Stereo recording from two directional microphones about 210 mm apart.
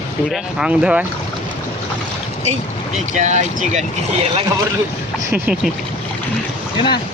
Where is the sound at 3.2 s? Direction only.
35° right (ahead or behind).